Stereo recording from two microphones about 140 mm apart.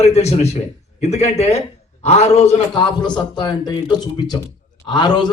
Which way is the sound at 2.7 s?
30° left (ahead or behind).